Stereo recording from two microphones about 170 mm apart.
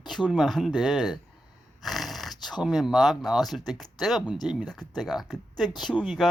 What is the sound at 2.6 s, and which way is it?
Speech, centre (ahead or behind).